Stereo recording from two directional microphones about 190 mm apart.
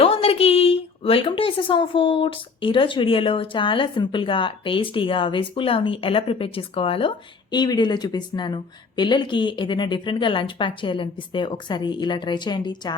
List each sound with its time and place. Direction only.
0.0 s a woman's voice: 30° left (ahead or behind)